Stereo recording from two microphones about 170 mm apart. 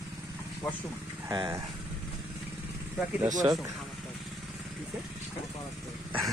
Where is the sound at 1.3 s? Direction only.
20° right (ahead or behind).